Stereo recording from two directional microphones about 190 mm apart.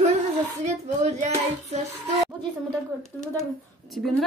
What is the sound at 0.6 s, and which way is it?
Speech, 40° right (ahead or behind).